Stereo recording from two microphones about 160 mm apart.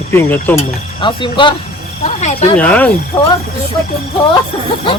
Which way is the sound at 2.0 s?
45° left (ahead or behind).